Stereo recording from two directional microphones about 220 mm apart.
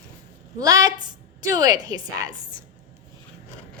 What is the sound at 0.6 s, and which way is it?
A woman's voice, 15° right (ahead or behind).